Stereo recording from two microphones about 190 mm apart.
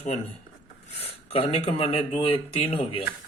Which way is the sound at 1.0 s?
30° left (ahead or behind).